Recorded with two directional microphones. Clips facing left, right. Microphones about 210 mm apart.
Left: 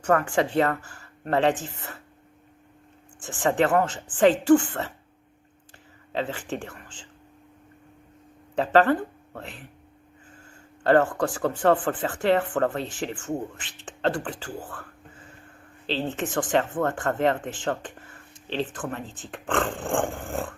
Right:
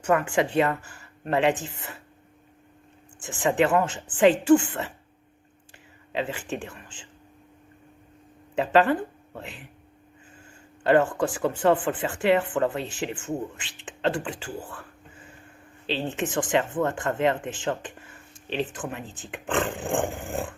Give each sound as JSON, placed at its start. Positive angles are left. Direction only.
{"t": 0.0, "sound": "speech", "side_deg": -15}
{"t": 3.2, "sound": "speech", "side_deg": -15}
{"t": 6.1, "sound": "speech", "side_deg": -15}
{"t": 8.5, "sound": "speech", "side_deg": -15}
{"t": 10.8, "sound": "speech", "side_deg": -15}
{"t": 15.9, "sound": "speech", "side_deg": -15}
{"t": 19.0, "sound": "speech", "side_deg": 20}
{"t": 19.3, "sound": "speech", "side_deg": -20}